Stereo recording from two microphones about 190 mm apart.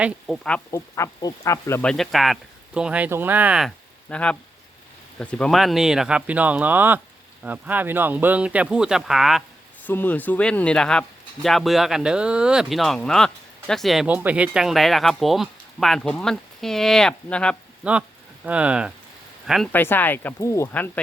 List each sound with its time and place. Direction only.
0.0 s speech: 5° left (ahead or behind)
1.8 s speech: centre (ahead or behind)
4.1 s speech: 5° left (ahead or behind)
9.8 s speech: 10° left (ahead or behind)
17.8 s speech: 5° right (ahead or behind)
19.7 s speech: 10° left (ahead or behind)